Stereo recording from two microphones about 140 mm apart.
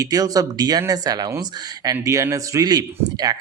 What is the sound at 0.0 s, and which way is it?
Speech, 25° right (ahead or behind).